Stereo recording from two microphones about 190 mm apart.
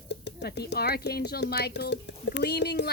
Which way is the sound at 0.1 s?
65° left (ahead or behind).